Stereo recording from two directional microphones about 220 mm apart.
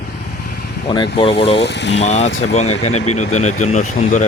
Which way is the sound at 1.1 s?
25° left (ahead or behind).